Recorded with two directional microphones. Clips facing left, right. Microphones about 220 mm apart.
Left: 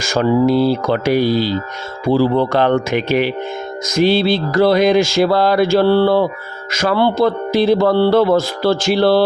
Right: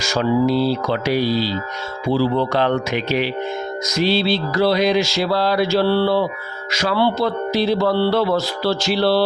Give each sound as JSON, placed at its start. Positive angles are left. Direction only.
{"t": 0.0, "sound": "music", "side_deg": 50}